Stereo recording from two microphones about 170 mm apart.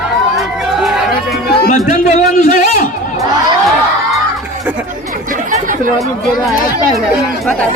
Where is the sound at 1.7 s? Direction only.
50° left (ahead or behind).